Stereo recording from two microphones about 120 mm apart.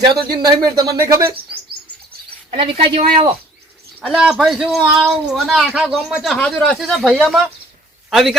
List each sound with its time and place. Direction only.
0.1 s speech: 30° right (ahead or behind)
2.5 s speech: 45° right (ahead or behind)
4.1 s speech: 5° right (ahead or behind)
6.4 s speech: 10° left (ahead or behind)